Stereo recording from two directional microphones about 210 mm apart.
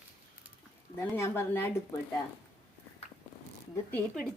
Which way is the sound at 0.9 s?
10° left (ahead or behind).